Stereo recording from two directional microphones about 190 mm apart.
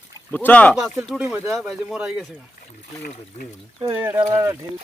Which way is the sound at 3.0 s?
45° left (ahead or behind).